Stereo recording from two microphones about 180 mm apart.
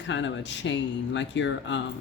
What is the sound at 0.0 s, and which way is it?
Speech, 85° left.